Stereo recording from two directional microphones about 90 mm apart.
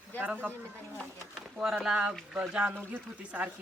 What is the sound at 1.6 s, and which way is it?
Speech, 5° right (ahead or behind).